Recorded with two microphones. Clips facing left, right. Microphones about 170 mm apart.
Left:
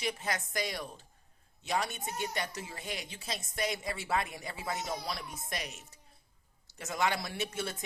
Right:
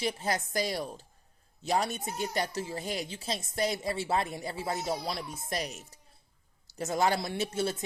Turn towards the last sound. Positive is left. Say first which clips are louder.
# right 6 dB
turn(degrees=-30)  # may be behind; listen again after turning